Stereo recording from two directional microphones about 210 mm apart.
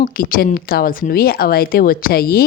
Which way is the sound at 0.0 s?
40° left (ahead or behind).